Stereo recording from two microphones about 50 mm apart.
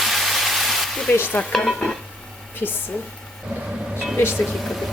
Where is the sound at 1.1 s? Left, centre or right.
Left.